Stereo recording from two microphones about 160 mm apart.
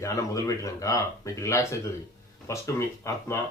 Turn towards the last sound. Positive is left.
turn(degrees=20)  # may be behind; listen again after turning